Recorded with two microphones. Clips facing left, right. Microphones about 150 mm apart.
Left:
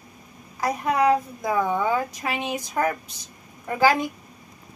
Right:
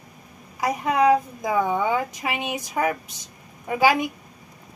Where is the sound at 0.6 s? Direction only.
15° right (ahead or behind).